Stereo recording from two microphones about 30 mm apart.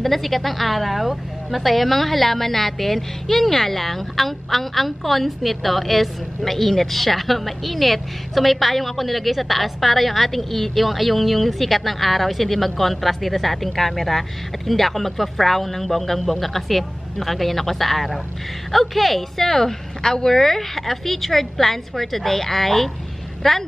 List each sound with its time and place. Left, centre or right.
0.0 s a woman's voice: centre